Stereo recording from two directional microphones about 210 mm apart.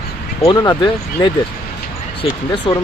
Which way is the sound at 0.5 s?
20° left (ahead or behind).